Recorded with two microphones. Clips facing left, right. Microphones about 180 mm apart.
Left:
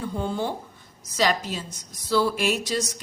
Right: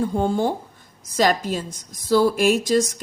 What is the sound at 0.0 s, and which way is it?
A woman's voice, 45° right (ahead or behind).